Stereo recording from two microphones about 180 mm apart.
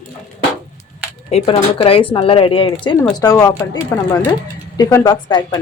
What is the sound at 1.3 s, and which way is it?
Speech, 35° left (ahead or behind).